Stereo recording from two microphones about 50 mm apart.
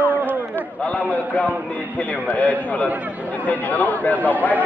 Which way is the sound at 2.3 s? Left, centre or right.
Left.